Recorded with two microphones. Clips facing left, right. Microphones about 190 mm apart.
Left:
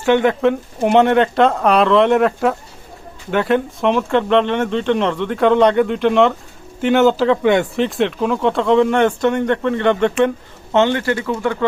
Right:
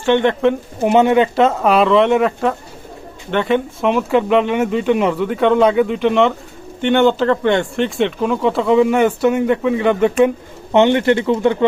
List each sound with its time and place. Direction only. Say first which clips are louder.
0.0 s speech: even; 5° left (ahead or behind)
10.2 s speech: right 2 dB; 15° right (ahead or behind)